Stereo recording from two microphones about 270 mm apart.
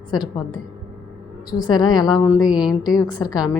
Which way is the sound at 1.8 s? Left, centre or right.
Centre.